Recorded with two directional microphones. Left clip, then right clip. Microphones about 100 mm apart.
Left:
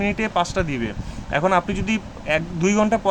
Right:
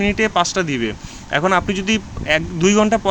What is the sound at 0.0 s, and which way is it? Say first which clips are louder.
A man's voice: right 5 dB; 20° right (ahead or behind).